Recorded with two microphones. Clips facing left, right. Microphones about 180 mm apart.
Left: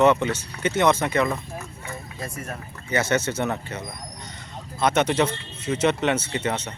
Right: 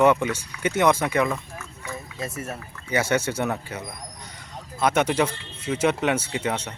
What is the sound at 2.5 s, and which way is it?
Speech, 10° right (ahead or behind).